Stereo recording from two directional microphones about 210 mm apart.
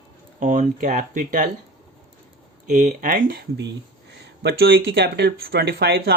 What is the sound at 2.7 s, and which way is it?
Speech, 35° right (ahead or behind).